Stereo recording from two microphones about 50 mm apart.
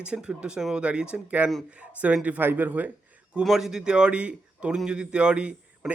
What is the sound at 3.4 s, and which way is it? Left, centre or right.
A man's voice, centre.